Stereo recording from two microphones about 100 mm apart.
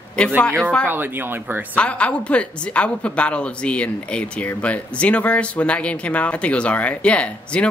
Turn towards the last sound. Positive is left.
turn(degrees=10)  # may be behind; listen again after turning